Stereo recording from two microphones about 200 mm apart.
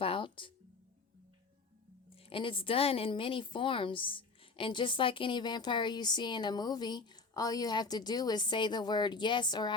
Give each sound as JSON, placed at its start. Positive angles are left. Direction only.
{"t": 0.0, "sound": "music", "side_deg": 25}
{"t": 2.1, "sound": "a woman's voice", "side_deg": 25}